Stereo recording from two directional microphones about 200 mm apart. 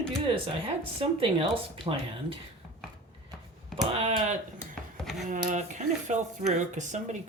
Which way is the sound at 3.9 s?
35° right (ahead or behind).